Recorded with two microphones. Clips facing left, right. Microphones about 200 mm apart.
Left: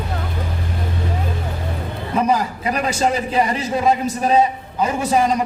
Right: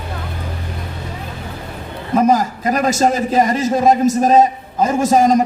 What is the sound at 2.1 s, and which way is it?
A man's voice, 45° right (ahead or behind).